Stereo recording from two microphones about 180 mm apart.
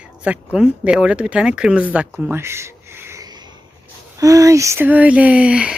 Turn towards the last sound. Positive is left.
turn(degrees=-5)  # may be behind; listen again after turning